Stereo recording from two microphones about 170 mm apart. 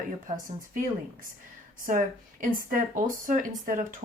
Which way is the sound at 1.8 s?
50° right (ahead or behind).